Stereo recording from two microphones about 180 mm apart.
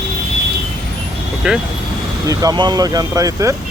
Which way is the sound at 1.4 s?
5° right (ahead or behind).